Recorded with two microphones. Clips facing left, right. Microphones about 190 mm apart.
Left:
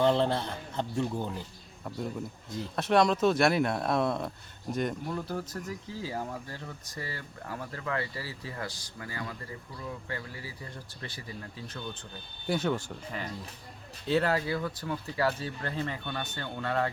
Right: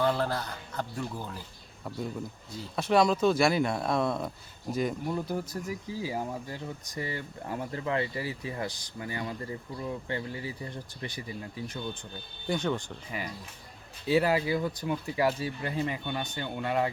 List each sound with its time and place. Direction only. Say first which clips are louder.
0.0 s speech: left 3 dB; 25° left (ahead or behind)
2.5 s speech: even; centre (ahead or behind)
5.0 s speech: right 3 dB; 15° right (ahead or behind)
12.5 s speech: left 1 dB; 5° left (ahead or behind)
13.1 s speech: even; 10° right (ahead or behind)